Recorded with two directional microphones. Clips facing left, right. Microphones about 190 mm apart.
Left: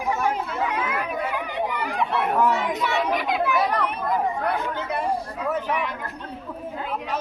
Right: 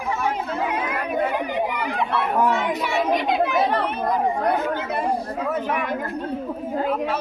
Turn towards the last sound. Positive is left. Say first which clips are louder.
# right 2 dB
turn(degrees=-50)  # may be behind; listen again after turning